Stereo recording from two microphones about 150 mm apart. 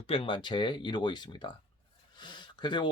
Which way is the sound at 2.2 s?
30° left (ahead or behind).